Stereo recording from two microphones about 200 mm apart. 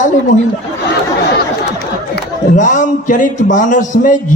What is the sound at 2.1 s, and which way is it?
A man's voice, 40° left (ahead or behind).